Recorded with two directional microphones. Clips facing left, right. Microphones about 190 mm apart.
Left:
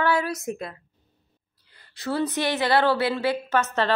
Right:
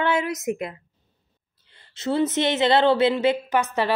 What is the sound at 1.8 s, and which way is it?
A woman's voice, 25° right (ahead or behind).